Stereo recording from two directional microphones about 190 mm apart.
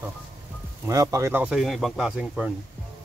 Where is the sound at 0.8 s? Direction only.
15° right (ahead or behind).